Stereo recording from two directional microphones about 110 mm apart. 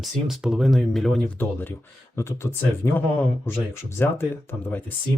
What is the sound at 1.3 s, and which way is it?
Speech, 20° left (ahead or behind).